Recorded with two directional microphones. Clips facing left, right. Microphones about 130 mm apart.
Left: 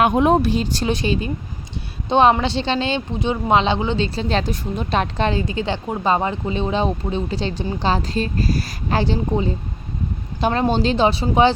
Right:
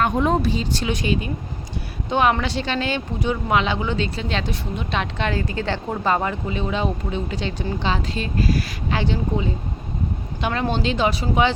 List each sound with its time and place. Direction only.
0.0 s speech: 60° left (ahead or behind)
0.7 s a woman's voice: 35° left (ahead or behind)
5.3 s speech: 20° left (ahead or behind)